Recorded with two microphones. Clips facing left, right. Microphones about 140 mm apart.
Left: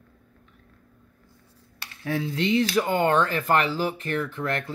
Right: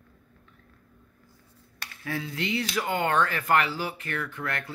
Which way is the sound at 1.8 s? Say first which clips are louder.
Left 5 dB; 25° left (ahead or behind).